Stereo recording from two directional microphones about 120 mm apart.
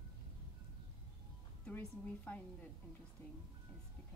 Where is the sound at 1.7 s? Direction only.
15° left (ahead or behind).